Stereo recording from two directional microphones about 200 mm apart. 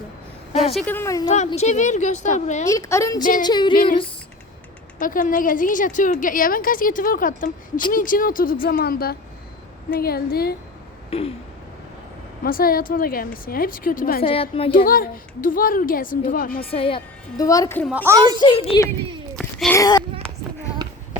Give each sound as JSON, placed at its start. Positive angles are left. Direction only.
{"t": 0.7, "sound": "a woman's voice", "side_deg": 5}
{"t": 1.5, "sound": "a woman's voice", "side_deg": 35}
{"t": 2.6, "sound": "a woman's voice", "side_deg": 15}
{"t": 4.9, "sound": "a woman's voice", "side_deg": 40}
{"t": 11.1, "sound": "speech", "side_deg": 30}
{"t": 12.4, "sound": "a woman's voice", "side_deg": 45}
{"t": 14.2, "sound": "speech", "side_deg": 30}
{"t": 14.8, "sound": "a woman's voice", "side_deg": 45}
{"t": 16.7, "sound": "a woman's voice", "side_deg": 25}
{"t": 17.8, "sound": "speech", "side_deg": -10}
{"t": 18.3, "sound": "speech", "side_deg": 25}
{"t": 19.4, "sound": "a sound", "side_deg": 0}
{"t": 19.7, "sound": "speech", "side_deg": 20}